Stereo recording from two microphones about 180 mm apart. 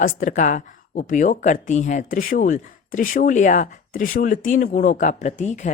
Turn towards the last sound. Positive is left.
turn(degrees=40)  # may be behind; listen again after turning